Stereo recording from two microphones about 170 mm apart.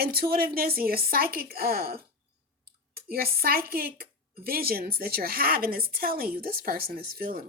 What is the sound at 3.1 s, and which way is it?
A woman's voice, 60° right (ahead or behind).